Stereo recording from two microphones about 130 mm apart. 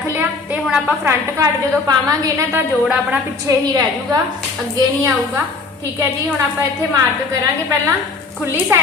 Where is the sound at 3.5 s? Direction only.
25° right (ahead or behind).